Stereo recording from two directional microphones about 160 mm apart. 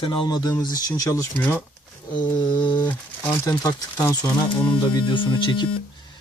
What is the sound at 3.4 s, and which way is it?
Speech, 25° left (ahead or behind).